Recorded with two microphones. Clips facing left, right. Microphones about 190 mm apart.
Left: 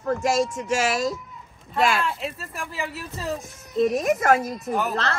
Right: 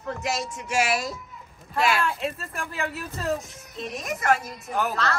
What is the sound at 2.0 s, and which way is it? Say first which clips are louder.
Speech: right 1 dB; centre (ahead or behind).